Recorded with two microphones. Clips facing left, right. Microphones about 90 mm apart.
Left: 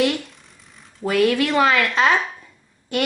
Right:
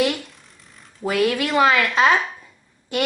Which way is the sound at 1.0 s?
10° right (ahead or behind).